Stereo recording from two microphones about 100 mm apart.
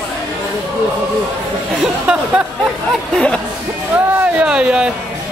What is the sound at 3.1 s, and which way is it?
Speech, 10° left (ahead or behind).